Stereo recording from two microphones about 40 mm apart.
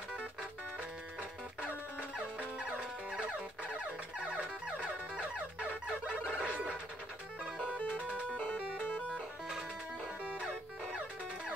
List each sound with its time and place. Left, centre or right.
2.1 s music: right
6.2 s fowl: right
7.7 s music: left
10.2 s music: right